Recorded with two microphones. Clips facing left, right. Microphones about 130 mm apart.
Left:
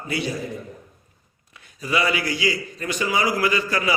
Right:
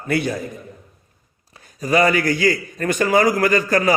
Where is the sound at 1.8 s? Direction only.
45° right (ahead or behind).